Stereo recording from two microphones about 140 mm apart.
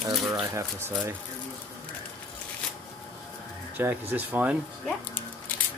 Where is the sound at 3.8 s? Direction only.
15° right (ahead or behind).